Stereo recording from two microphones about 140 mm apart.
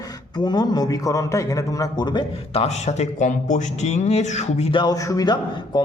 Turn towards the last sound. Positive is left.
turn(degrees=30)  # may be behind; listen again after turning